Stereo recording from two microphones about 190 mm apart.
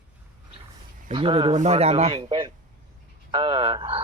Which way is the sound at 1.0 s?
30° right (ahead or behind).